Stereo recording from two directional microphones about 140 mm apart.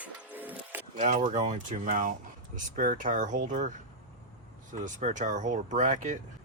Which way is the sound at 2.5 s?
75° right (ahead or behind).